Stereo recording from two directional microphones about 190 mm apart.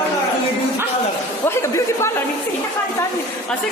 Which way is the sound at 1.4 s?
15° left (ahead or behind).